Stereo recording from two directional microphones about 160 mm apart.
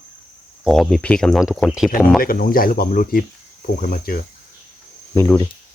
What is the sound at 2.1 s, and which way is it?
Speech, 65° left (ahead or behind).